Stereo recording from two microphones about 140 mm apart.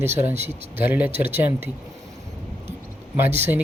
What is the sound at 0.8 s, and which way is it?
Speech, 15° right (ahead or behind).